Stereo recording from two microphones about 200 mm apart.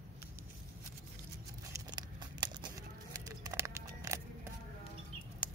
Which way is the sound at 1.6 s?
20° right (ahead or behind).